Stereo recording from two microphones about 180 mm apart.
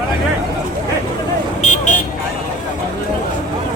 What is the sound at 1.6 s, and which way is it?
Vehicle, 40° left (ahead or behind).